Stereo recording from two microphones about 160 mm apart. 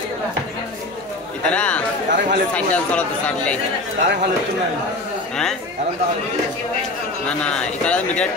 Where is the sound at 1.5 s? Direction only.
10° left (ahead or behind).